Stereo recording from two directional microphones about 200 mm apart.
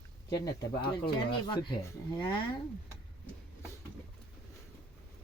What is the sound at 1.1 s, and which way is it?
Speech, 20° left (ahead or behind).